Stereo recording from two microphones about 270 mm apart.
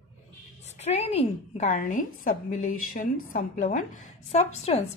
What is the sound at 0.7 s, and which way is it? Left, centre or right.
A woman's voice, left.